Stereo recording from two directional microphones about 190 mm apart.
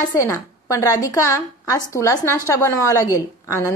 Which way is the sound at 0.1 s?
15° left (ahead or behind).